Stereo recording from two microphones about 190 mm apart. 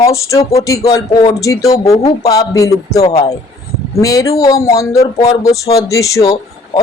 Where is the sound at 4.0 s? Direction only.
15° left (ahead or behind).